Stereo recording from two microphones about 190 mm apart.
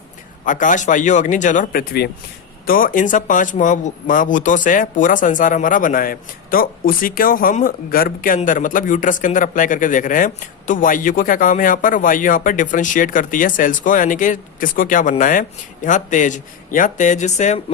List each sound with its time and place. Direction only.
0.4 s speech: 45° left (ahead or behind)